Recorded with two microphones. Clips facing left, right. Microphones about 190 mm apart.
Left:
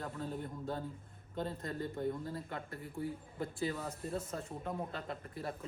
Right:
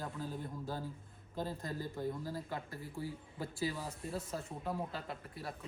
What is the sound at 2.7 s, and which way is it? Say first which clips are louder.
Speech: left 2 dB; 60° left (ahead or behind).